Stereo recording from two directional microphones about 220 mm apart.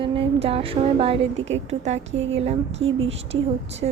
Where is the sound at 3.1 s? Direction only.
25° right (ahead or behind).